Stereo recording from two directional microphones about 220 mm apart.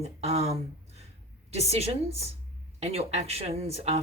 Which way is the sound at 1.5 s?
30° right (ahead or behind).